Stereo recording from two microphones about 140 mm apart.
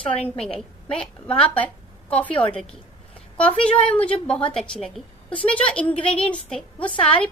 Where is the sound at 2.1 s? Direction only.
10° left (ahead or behind).